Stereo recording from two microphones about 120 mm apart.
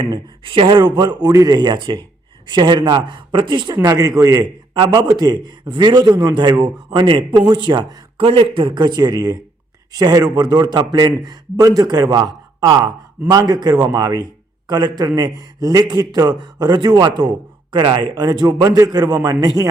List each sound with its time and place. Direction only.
0.0 s a man's voice: 45° right (ahead or behind)
3.8 s a man's voice: 30° right (ahead or behind)
8.2 s a man's voice: 45° right (ahead or behind); by 19.6 s 30° right (ahead or behind)